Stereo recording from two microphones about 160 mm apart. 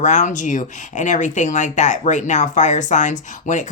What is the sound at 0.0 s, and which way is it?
Speech, 50° left (ahead or behind).